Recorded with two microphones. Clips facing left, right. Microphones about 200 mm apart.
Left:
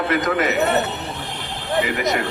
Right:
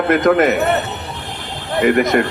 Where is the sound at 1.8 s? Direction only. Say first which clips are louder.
Right 14 dB; 50° right (ahead or behind).